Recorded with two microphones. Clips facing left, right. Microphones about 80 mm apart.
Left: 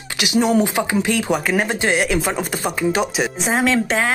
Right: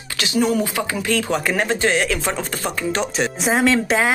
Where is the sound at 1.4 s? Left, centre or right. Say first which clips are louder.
Even; centre.